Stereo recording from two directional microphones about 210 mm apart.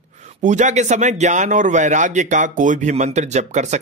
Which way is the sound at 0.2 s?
35° right (ahead or behind).